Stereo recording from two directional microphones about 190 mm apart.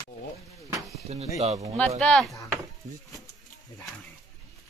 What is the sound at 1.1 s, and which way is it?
Speech, 35° right (ahead or behind).